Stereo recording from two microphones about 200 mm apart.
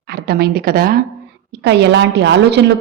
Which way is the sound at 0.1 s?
50° right (ahead or behind).